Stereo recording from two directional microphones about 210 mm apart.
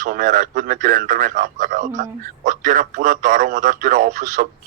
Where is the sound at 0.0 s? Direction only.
40° right (ahead or behind).